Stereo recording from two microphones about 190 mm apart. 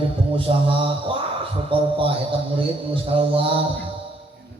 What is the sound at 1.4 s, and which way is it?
A man's voice, 30° right (ahead or behind).